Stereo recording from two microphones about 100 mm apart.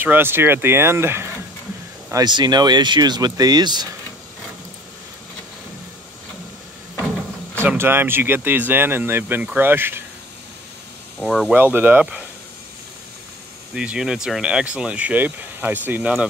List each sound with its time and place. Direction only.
0.0 s speech: 20° right (ahead or behind)
2.1 s speech: 45° right (ahead or behind)
7.6 s speech: 20° right (ahead or behind)
11.1 s speech: 5° right (ahead or behind)
11.5 s speech: 20° right (ahead or behind)
13.7 s speech: 10° right (ahead or behind)